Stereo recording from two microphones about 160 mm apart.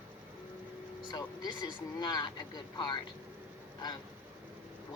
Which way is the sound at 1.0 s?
25° left (ahead or behind).